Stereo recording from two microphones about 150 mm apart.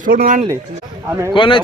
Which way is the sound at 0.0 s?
65° right (ahead or behind).